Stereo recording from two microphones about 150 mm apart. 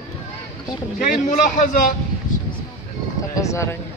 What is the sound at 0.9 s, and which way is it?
Speech, 60° left (ahead or behind).